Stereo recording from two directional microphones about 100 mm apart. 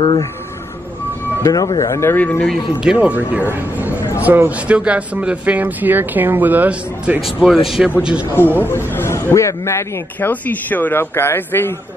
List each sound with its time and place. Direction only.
1.4 s speech: 40° left (ahead or behind)
2.0 s speech: 20° left (ahead or behind)
2.5 s speech: 10° right (ahead or behind)
7.2 s speech: centre (ahead or behind)
8.6 s speech: 25° left (ahead or behind)